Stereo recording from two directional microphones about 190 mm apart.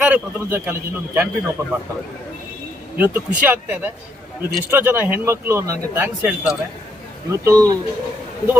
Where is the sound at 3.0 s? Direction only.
10° right (ahead or behind).